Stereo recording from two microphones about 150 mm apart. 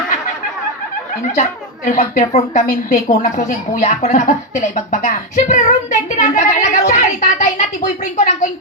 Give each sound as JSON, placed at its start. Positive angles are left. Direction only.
{"t": 1.4, "sound": "a child's voice", "side_deg": 60}